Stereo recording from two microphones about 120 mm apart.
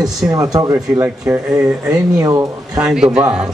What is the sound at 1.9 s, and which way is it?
Speech, 25° right (ahead or behind).